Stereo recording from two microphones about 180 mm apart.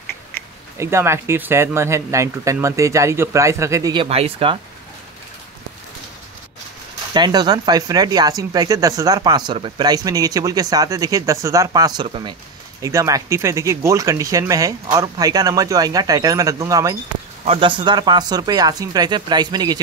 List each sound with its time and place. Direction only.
0.7 s speech: 15° right (ahead or behind); by 4.6 s 30° right (ahead or behind)
7.2 s speech: 25° right (ahead or behind)